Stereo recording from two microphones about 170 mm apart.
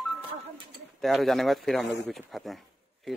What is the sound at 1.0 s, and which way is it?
Speech, centre (ahead or behind).